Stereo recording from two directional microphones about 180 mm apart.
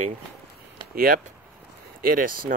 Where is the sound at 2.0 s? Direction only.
50° right (ahead or behind).